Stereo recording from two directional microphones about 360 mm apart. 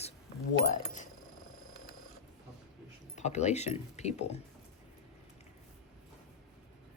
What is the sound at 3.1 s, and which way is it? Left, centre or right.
Speech, centre.